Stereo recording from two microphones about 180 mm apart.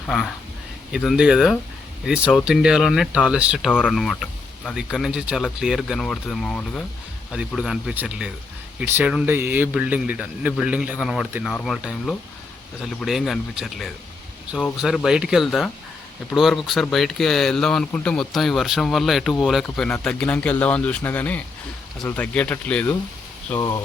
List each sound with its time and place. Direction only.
0.9 s speech: 5° right (ahead or behind)
3.7 s speech: 10° left (ahead or behind)
23.6 s speech: 20° left (ahead or behind)